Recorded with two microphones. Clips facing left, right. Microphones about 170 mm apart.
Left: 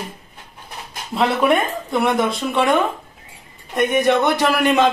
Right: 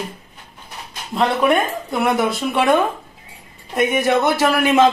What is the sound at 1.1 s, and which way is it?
Speech, centre (ahead or behind).